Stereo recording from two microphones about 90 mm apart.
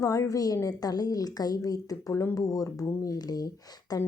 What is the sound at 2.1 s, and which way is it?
Speech, 25° left (ahead or behind).